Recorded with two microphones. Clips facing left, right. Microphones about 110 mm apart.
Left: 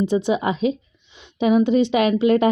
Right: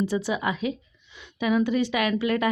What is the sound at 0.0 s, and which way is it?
A woman's voice, 20° left (ahead or behind).